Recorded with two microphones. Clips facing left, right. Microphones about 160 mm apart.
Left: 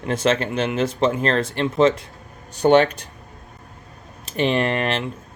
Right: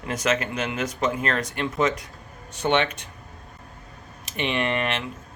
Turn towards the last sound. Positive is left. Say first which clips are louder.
# left 4 dB
turn(degrees=35)  # may be behind; listen again after turning